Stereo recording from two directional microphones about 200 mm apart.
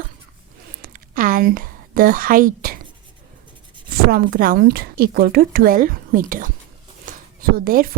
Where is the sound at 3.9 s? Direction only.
50° right (ahead or behind).